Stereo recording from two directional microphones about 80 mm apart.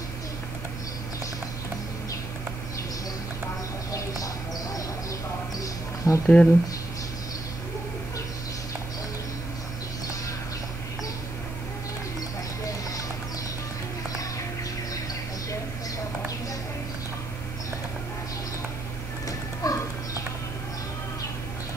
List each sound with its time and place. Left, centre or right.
5.6 s a sound: left
6.2 s speech: centre
19.6 s music: left